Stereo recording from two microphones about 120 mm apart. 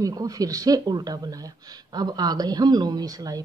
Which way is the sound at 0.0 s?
30° right (ahead or behind).